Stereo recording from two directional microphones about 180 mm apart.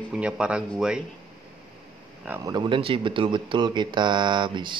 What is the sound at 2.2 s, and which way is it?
Speech, 10° right (ahead or behind).